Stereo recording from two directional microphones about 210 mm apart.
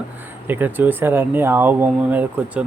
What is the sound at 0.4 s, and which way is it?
Speech, 10° right (ahead or behind).